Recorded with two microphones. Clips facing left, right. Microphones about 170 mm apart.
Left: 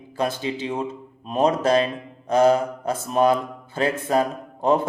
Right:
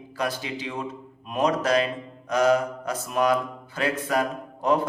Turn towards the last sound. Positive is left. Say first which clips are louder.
# left 3 dB
turn(degrees=25)  # may be behind; listen again after turning